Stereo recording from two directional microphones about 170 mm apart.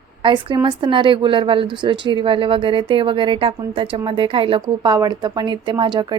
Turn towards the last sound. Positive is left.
turn(degrees=-25)  # may be behind; listen again after turning